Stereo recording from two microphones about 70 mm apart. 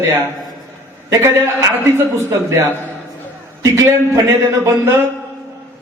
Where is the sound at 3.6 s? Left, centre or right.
Right.